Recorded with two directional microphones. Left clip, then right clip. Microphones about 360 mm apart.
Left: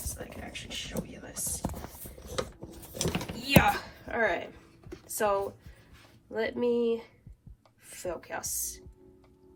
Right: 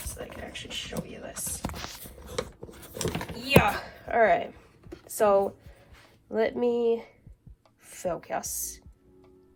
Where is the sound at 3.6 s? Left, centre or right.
Centre.